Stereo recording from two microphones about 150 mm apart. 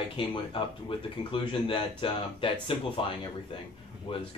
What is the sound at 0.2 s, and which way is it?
Speech, 35° left (ahead or behind).